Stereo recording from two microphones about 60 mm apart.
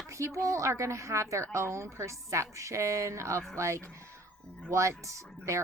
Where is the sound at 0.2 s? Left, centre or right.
Right.